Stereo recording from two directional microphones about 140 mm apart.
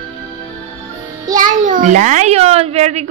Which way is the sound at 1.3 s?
65° right (ahead or behind).